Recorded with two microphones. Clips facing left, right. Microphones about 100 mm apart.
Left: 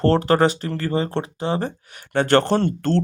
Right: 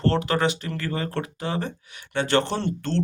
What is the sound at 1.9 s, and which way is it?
Speech, 45° left (ahead or behind).